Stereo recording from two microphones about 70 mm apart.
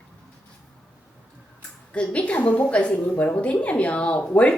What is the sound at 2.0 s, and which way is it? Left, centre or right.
A woman's voice, centre.